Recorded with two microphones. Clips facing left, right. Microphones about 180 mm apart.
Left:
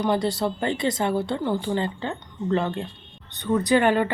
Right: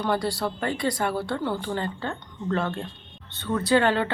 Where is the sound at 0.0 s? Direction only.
20° left (ahead or behind).